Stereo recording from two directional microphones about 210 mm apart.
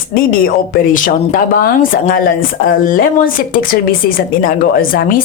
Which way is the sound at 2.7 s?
40° left (ahead or behind).